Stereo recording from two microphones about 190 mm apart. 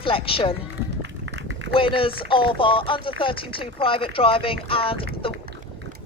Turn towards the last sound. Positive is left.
turn(degrees=30)  # may be behind; listen again after turning